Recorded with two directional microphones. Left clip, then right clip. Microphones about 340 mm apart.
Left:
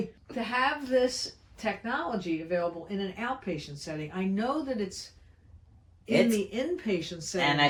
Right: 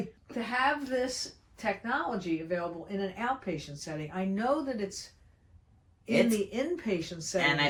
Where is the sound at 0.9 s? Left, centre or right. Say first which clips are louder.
Left 6 dB; centre.